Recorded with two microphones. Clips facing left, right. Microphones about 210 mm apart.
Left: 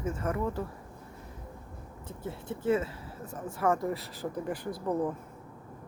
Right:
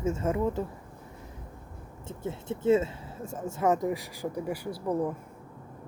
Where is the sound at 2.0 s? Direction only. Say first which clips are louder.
Right 4 dB; 25° right (ahead or behind); by 5.1 s 10° right (ahead or behind).